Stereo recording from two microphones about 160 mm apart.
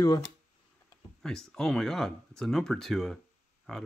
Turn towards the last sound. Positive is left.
turn(degrees=5)  # may be behind; listen again after turning